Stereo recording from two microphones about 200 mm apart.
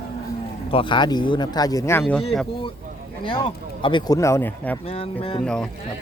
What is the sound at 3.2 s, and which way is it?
Speech, 25° left (ahead or behind).